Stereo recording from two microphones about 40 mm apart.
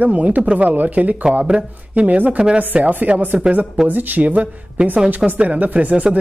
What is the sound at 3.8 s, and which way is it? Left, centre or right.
Speech, right.